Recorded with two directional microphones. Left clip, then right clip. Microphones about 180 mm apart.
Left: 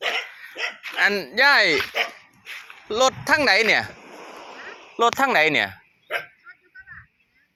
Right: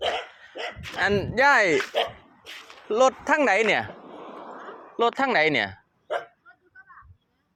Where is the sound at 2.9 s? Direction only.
25° right (ahead or behind).